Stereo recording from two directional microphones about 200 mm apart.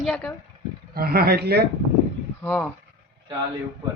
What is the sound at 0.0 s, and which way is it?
Speech, 5° left (ahead or behind).